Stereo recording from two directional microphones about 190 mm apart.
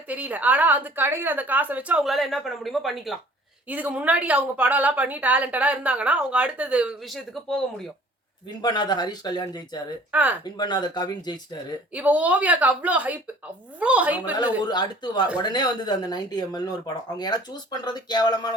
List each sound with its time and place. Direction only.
0.1 s a woman's voice: 10° right (ahead or behind)
8.6 s speech: 20° left (ahead or behind)
10.1 s a woman's voice: 10° right (ahead or behind)
10.6 s speech: 20° left (ahead or behind)
11.9 s a woman's voice: 10° right (ahead or behind)
14.6 s speech: 25° left (ahead or behind)